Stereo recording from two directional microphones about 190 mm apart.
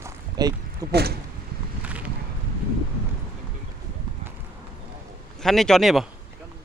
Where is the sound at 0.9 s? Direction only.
55° right (ahead or behind).